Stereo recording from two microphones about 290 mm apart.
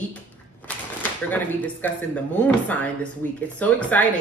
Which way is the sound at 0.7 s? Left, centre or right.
Centre.